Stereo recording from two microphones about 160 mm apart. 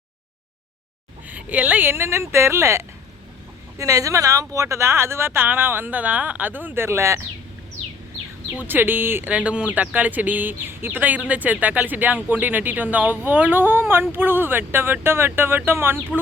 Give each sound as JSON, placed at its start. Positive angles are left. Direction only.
{"t": 1.3, "sound": "speech", "side_deg": -10}
{"t": 8.5, "sound": "speech", "side_deg": -10}